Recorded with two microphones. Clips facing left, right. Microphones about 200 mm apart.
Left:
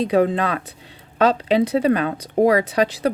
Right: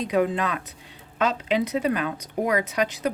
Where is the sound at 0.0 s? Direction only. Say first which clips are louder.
Left 5 dB; 30° left (ahead or behind).